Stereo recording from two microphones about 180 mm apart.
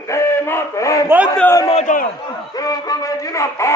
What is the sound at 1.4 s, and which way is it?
Speech, 15° left (ahead or behind).